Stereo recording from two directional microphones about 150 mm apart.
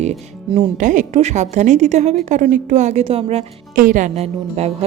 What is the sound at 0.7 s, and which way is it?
A woman's voice, 55° right (ahead or behind).